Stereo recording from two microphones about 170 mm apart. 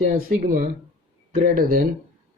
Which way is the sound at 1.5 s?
55° right (ahead or behind).